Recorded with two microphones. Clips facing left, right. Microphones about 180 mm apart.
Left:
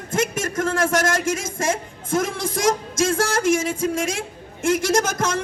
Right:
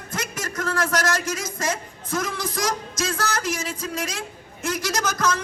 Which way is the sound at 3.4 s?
50° left (ahead or behind).